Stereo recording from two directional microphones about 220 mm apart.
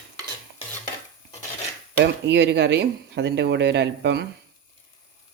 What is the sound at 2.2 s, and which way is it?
Speech, 50° right (ahead or behind).